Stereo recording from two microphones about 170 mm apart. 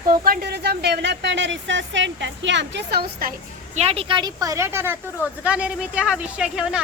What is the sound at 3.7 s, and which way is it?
A woman's voice, 35° right (ahead or behind).